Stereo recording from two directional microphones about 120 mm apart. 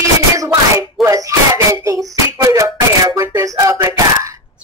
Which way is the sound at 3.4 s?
25° right (ahead or behind).